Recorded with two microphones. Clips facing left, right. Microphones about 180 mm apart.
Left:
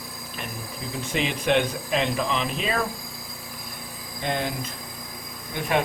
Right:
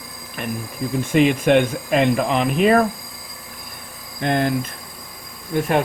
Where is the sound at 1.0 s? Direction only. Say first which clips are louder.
Right 9 dB; 50° right (ahead or behind).